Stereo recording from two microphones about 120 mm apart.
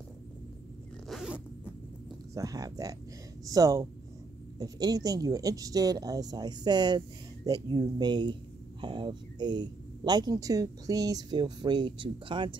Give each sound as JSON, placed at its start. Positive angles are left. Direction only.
{"t": 1.0, "sound": "zipper", "side_deg": 0}
{"t": 2.3, "sound": "speech", "side_deg": -30}